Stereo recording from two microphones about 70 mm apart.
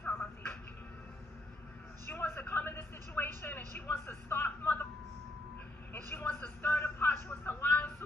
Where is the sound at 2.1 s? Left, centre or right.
Left.